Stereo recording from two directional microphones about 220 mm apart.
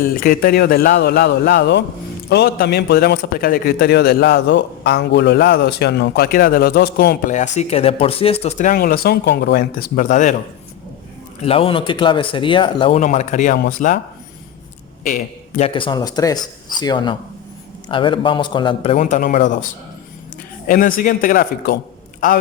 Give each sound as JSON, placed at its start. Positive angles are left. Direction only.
{"t": 0.0, "sound": "a man's voice", "side_deg": 40}
{"t": 11.4, "sound": "a man's voice", "side_deg": 25}
{"t": 15.0, "sound": "speech", "side_deg": 35}
{"t": 20.7, "sound": "a man's voice", "side_deg": 40}